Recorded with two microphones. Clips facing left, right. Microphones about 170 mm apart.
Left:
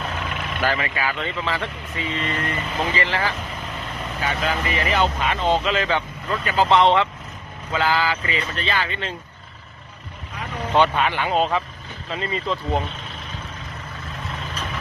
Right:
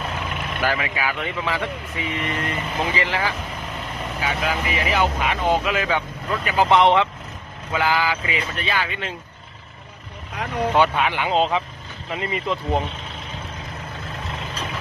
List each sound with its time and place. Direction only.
0.0 s speech: 5° right (ahead or behind)
10.8 s speech: 10° right (ahead or behind)